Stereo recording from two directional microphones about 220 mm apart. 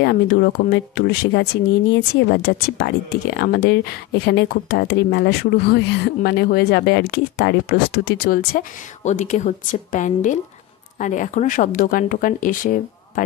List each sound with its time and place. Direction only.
0.0 s a woman's voice: 45° left (ahead or behind)